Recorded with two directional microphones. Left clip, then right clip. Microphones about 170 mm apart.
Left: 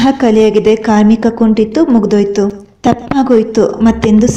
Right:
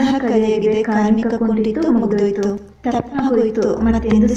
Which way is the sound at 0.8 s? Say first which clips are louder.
Left 6 dB; 55° left (ahead or behind).